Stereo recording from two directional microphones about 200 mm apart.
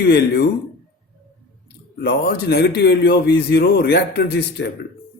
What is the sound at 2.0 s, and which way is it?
A man's voice, 55° left (ahead or behind).